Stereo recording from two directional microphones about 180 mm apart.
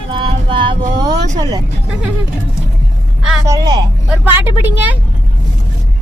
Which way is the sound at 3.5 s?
20° right (ahead or behind).